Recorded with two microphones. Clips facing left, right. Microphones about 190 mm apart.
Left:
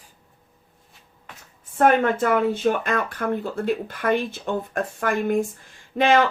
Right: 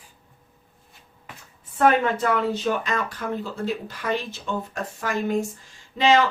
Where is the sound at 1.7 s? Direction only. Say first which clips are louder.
Left 2 dB; 50° left (ahead or behind).